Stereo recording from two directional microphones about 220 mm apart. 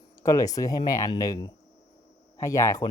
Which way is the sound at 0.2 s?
15° left (ahead or behind).